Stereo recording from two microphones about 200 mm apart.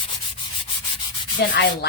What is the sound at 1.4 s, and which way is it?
Speech, 60° left (ahead or behind).